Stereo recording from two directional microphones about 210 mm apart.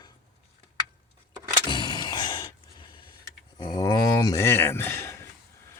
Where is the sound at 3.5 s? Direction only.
20° left (ahead or behind).